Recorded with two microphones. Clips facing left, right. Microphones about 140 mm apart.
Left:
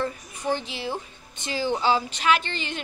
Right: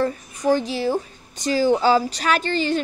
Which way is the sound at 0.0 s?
40° right (ahead or behind).